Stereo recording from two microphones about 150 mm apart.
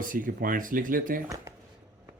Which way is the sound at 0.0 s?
65° right (ahead or behind).